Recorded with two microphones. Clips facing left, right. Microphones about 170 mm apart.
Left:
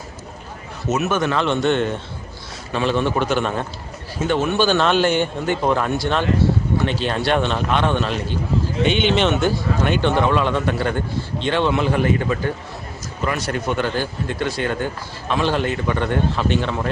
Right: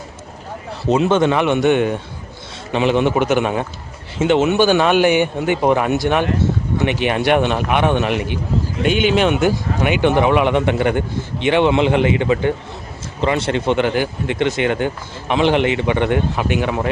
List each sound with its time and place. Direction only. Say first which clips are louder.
0.9 s a man's voice: right 6 dB; 30° right (ahead or behind)
15.6 s speech: right 5 dB; 80° right
15.9 s speech: right 3 dB; 15° right (ahead or behind)